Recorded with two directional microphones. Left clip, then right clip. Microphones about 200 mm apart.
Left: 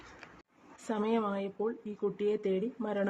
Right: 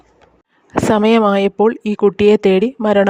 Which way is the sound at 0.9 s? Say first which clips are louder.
Right 19 dB; 55° right (ahead or behind).